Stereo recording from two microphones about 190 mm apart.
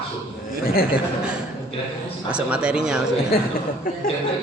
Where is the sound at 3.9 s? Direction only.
50° left (ahead or behind).